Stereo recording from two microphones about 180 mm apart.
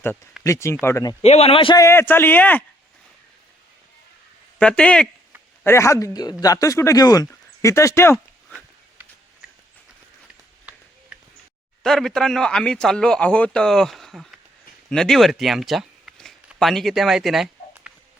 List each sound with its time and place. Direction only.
0.4 s speech: 15° left (ahead or behind)
1.2 s speech: 35° left (ahead or behind)
1.8 s speech: 15° left (ahead or behind)
4.5 s speech: 5° left (ahead or behind)
5.6 s speech: 15° left (ahead or behind)
11.8 s speech: centre (ahead or behind)